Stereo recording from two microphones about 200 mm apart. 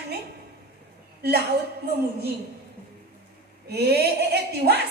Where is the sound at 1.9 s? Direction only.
50° right (ahead or behind).